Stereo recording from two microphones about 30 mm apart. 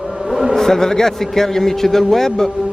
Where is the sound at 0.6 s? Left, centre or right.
Centre.